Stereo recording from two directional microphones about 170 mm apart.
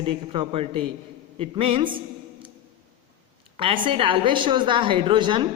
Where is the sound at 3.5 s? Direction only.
30° right (ahead or behind).